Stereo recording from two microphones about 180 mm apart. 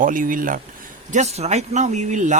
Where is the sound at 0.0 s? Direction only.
50° right (ahead or behind).